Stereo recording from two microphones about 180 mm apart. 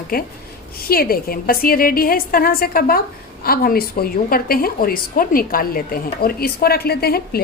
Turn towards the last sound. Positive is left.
turn(degrees=60)  # may be behind; listen again after turning